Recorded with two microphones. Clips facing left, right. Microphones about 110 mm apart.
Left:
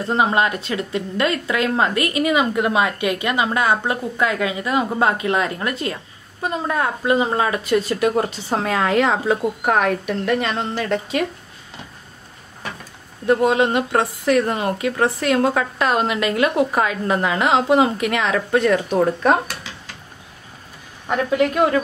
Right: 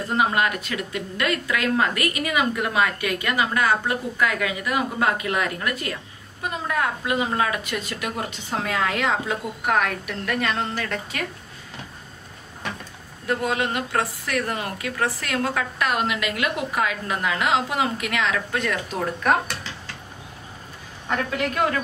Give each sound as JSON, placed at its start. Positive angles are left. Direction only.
{"t": 0.0, "sound": "a woman's voice", "side_deg": 25}
{"t": 13.3, "sound": "a woman's voice", "side_deg": 25}
{"t": 21.1, "sound": "a woman's voice", "side_deg": 20}